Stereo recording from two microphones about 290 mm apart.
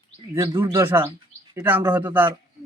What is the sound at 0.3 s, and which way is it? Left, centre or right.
Speech, centre.